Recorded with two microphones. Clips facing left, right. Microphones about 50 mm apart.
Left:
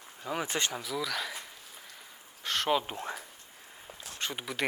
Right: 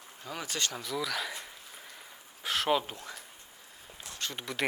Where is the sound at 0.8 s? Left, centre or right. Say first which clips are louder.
Even; centre.